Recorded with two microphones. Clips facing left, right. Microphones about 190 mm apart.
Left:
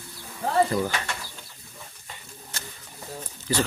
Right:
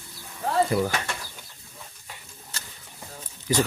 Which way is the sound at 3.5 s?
10° right (ahead or behind).